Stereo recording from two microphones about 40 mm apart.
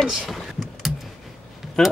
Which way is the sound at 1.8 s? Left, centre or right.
Centre.